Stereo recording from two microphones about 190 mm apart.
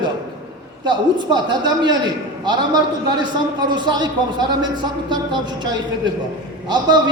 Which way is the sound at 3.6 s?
20° right (ahead or behind).